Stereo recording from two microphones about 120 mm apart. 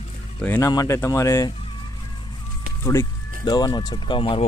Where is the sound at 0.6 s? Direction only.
30° left (ahead or behind).